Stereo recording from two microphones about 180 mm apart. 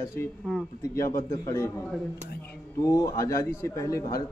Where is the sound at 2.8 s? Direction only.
20° left (ahead or behind).